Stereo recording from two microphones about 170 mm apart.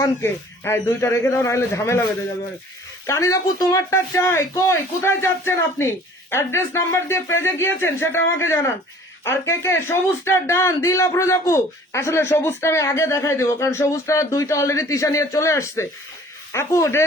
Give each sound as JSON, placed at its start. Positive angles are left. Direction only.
{"t": 0.0, "sound": "a man's voice", "side_deg": 15}
{"t": 3.1, "sound": "a man's voice", "side_deg": 20}